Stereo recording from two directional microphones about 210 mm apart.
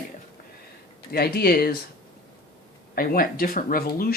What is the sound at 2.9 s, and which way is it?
Speech, 45° left (ahead or behind).